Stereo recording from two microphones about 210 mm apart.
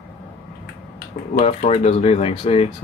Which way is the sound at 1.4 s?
30° left (ahead or behind).